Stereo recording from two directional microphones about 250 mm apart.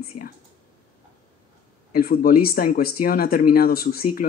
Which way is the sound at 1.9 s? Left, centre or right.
Left.